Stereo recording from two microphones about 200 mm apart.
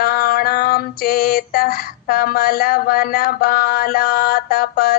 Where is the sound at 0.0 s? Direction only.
50° left (ahead or behind).